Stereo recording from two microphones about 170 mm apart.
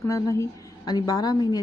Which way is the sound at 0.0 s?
20° left (ahead or behind).